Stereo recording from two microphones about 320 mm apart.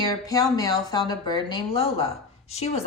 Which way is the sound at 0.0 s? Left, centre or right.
Centre.